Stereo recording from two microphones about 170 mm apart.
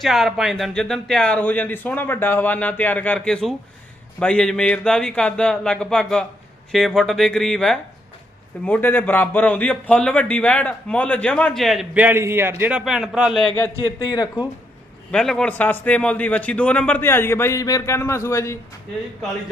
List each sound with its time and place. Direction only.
0.0 s speech: centre (ahead or behind)
13.8 s a man's voice: 25° left (ahead or behind)
15.1 s speech: 5° left (ahead or behind)